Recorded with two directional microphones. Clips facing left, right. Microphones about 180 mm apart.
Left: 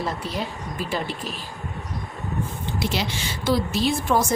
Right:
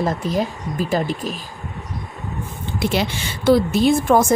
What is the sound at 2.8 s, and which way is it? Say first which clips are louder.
Speech: right 6 dB; 55° right (ahead or behind).